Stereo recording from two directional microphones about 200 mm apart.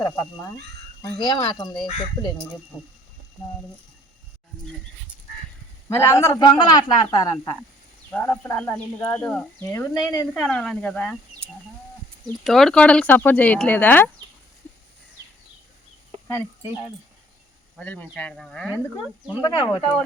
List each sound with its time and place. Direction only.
0.0 s speech: 15° left (ahead or behind)
5.9 s speech: 15° left (ahead or behind)
12.5 s speech: centre (ahead or behind)
17.7 s speech: 5° left (ahead or behind)
19.4 s speech: 25° left (ahead or behind)